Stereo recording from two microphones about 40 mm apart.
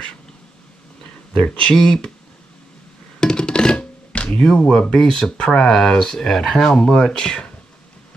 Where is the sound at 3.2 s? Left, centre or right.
Left.